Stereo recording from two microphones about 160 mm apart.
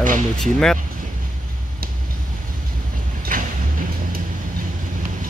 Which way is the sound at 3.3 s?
60° right (ahead or behind).